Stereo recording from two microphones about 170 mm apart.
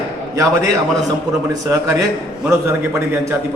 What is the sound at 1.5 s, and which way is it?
Speech, 20° right (ahead or behind).